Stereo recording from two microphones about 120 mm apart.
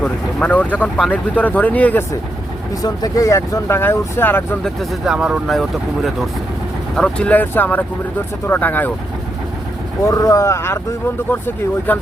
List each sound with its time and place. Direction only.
0.0 s speech: 10° left (ahead or behind)
2.8 s speech: 30° left (ahead or behind)
4.6 s speech: centre (ahead or behind)
10.1 s speech: 30° left (ahead or behind)